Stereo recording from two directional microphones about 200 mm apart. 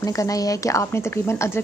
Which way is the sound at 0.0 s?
15° left (ahead or behind).